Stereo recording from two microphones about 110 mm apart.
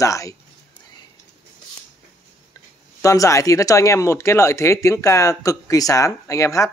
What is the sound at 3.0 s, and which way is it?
Speech, 30° left (ahead or behind).